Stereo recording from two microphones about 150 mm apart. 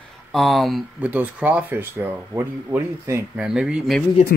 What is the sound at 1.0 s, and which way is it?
Speech, 10° right (ahead or behind).